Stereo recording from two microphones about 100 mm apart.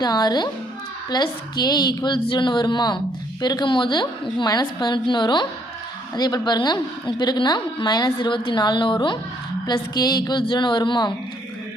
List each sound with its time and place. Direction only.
0.0 s a woman's voice: 45° left (ahead or behind)